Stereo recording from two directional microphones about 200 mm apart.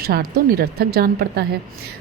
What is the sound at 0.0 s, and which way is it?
Music, 50° right (ahead or behind).